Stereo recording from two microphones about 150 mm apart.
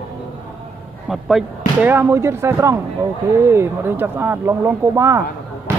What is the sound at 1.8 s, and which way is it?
Speech, 15° right (ahead or behind).